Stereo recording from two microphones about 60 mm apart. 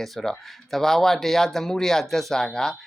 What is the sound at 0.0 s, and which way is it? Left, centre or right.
Speech, centre.